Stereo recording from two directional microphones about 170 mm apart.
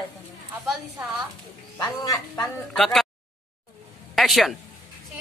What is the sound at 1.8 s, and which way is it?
Speech, 25° left (ahead or behind).